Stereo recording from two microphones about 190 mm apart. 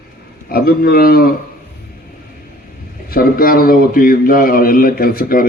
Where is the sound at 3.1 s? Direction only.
50° left (ahead or behind).